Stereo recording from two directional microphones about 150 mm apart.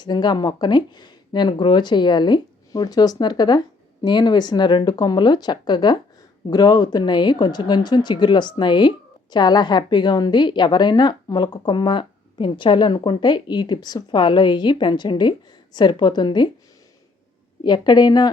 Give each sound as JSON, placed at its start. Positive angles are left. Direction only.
{"t": 0.0, "sound": "a woman's voice", "side_deg": 30}
{"t": 17.6, "sound": "speech", "side_deg": 30}